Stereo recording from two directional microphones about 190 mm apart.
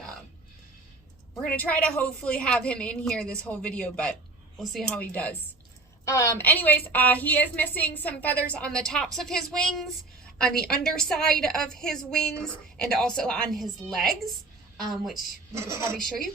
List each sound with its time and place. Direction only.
1.5 s a woman's voice: 5° left (ahead or behind)
16.0 s a woman's voice: centre (ahead or behind)